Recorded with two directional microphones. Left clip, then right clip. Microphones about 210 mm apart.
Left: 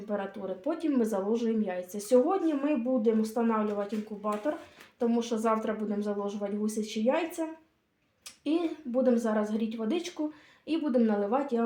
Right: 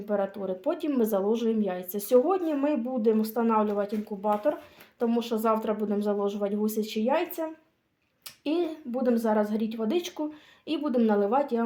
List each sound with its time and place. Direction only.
0.1 s speech: 50° right (ahead or behind)
8.4 s speech: 50° right (ahead or behind)